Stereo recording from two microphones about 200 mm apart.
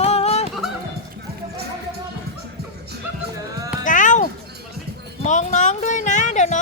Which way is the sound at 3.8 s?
40° left (ahead or behind).